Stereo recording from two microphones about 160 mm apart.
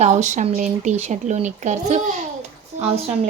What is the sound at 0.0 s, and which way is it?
Speech, 45° right (ahead or behind).